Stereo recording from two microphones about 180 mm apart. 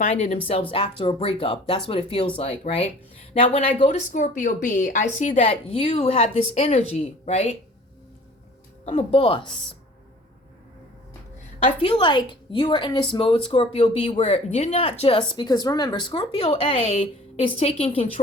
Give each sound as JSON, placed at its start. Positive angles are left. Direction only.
{"t": 0.0, "sound": "a woman's voice", "side_deg": 40}
{"t": 3.8, "sound": "a woman's voice", "side_deg": 45}
{"t": 5.5, "sound": "speech", "side_deg": 30}
{"t": 8.8, "sound": "speech", "side_deg": 35}
{"t": 11.6, "sound": "a woman's voice", "side_deg": 30}